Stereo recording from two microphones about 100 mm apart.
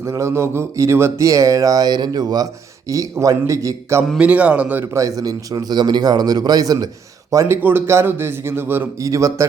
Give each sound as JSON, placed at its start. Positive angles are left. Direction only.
{"t": 0.0, "sound": "a man's voice", "side_deg": -30}
{"t": 4.2, "sound": "a man's voice", "side_deg": -15}
{"t": 4.9, "sound": "a man's voice", "side_deg": -35}
{"t": 9.0, "sound": "a man's voice", "side_deg": -35}